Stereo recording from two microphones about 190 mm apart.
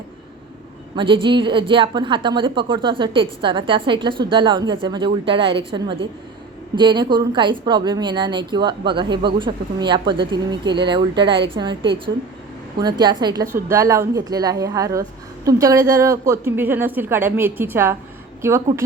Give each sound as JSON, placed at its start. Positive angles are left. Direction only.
{"t": 0.9, "sound": "a woman's voice", "side_deg": -25}